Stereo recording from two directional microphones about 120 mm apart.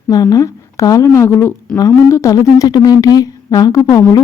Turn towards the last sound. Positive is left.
turn(degrees=30)  # may be behind; listen again after turning